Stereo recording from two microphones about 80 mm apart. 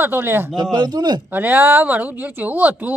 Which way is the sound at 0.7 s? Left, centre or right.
Right.